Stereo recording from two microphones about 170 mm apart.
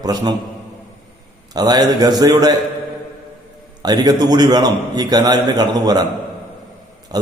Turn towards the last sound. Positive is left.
turn(degrees=-25)  # may be behind; listen again after turning